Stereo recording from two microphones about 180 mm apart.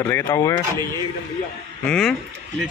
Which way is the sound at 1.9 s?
5° left (ahead or behind).